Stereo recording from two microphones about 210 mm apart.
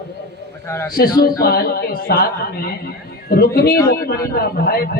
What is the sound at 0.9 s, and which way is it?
A man's voice, 45° left (ahead or behind).